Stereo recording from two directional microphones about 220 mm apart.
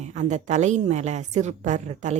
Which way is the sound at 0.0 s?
30° right (ahead or behind).